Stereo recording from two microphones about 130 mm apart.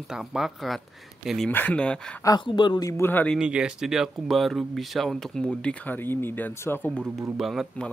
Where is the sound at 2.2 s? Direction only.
25° left (ahead or behind).